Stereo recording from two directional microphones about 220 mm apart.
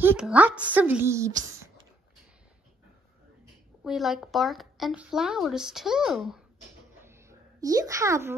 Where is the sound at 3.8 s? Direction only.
Centre (ahead or behind).